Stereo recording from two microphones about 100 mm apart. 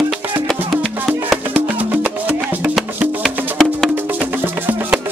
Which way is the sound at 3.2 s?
5° left (ahead or behind).